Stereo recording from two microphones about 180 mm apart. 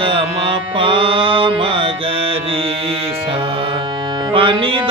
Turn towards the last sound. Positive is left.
turn(degrees=-30)  # may be behind; listen again after turning